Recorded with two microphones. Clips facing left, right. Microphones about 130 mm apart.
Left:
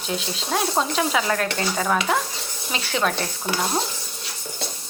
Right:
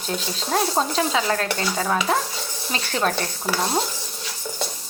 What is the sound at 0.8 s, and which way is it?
Stir, 30° right (ahead or behind).